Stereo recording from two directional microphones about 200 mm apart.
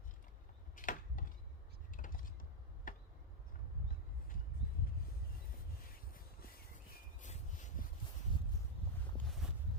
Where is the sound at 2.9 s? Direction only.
45° left (ahead or behind).